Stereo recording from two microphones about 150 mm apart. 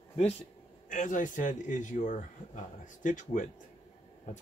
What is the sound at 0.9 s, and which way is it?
Speech, 60° left (ahead or behind).